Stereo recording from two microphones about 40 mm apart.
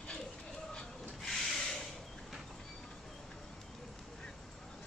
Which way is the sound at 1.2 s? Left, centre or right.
Centre.